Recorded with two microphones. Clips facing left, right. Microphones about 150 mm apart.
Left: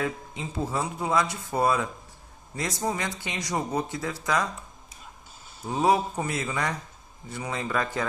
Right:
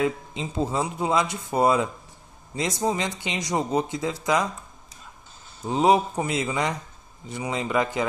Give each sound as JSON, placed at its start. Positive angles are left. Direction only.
{"t": 0.0, "sound": "speech", "side_deg": -20}
{"t": 5.7, "sound": "speech", "side_deg": -20}